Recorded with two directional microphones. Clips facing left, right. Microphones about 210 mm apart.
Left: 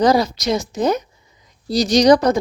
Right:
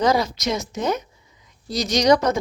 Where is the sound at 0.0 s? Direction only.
35° left (ahead or behind).